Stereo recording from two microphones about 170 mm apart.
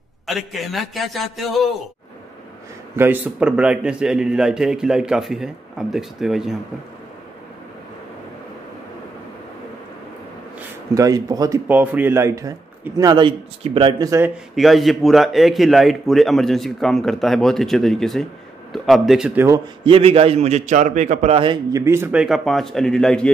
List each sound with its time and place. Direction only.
0.5 s a man's voice: centre (ahead or behind)
3.0 s a man's voice: 10° right (ahead or behind)
11.0 s a man's voice: 20° right (ahead or behind)
14.3 s a man's voice: centre (ahead or behind)
19.8 s a man's voice: 35° right (ahead or behind); by 23.3 s 5° left (ahead or behind)